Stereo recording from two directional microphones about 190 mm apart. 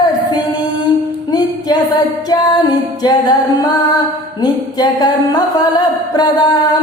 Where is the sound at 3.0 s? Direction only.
20° left (ahead or behind).